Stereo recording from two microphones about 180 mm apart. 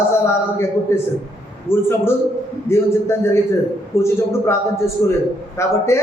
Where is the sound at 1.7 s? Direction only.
15° left (ahead or behind).